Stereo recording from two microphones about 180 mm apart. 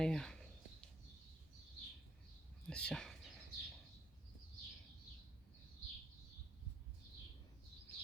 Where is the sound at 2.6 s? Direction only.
5° left (ahead or behind).